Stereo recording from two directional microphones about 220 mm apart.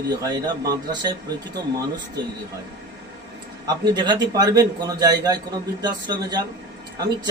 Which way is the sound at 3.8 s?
20° right (ahead or behind).